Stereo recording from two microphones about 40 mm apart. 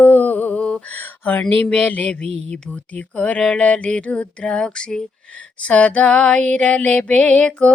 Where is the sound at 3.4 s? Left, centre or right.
Left.